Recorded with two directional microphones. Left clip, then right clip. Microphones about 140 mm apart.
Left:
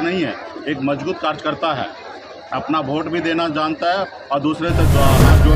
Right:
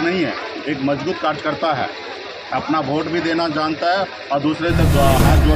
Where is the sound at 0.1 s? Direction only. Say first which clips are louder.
Right 1 dB; 15° left (ahead or behind).